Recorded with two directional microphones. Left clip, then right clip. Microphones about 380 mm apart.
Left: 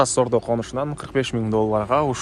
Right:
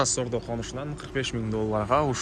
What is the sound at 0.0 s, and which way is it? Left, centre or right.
Speech, centre.